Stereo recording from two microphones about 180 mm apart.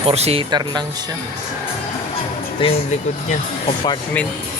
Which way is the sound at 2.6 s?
30° left (ahead or behind).